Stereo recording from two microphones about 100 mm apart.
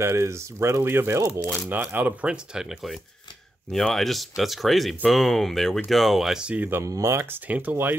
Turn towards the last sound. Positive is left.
turn(degrees=-20)  # may be behind; listen again after turning